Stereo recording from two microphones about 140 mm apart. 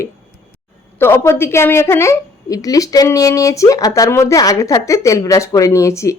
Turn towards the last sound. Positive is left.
turn(degrees=20)  # may be behind; listen again after turning